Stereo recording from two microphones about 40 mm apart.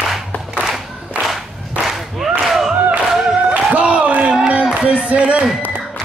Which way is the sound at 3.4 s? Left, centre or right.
Right.